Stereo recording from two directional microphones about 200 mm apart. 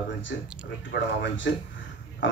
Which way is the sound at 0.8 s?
65° left (ahead or behind).